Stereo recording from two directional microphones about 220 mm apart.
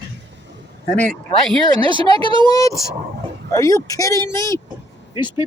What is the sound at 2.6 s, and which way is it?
Speech, 15° left (ahead or behind).